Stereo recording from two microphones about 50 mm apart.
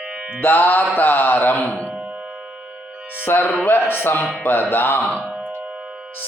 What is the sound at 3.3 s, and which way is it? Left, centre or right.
A man's voice, left.